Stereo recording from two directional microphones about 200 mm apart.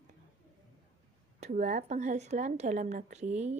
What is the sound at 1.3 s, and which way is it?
Speech, 35° right (ahead or behind).